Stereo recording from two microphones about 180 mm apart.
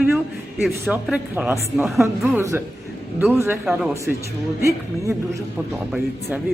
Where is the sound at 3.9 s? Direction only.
15° right (ahead or behind).